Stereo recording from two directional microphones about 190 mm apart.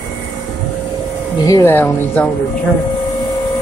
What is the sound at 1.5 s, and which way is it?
Speech, 15° left (ahead or behind).